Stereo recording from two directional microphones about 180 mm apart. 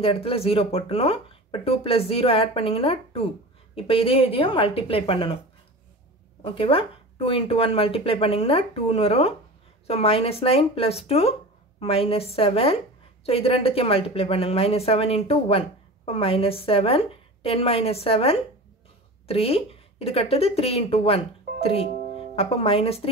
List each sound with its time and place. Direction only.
0.0 s speech: 30° left (ahead or behind)
6.4 s speech: 30° left (ahead or behind)